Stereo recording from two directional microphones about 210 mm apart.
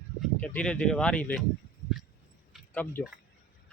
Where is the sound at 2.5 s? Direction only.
5° left (ahead or behind).